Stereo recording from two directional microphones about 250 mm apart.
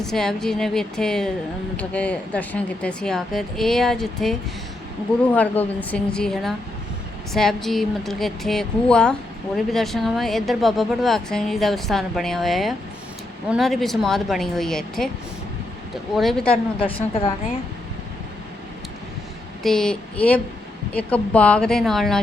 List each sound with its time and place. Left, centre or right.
0.0 s a woman's voice: centre
16.1 s a woman's voice: centre
16.8 s a woman's voice: left
19.6 s a woman's voice: centre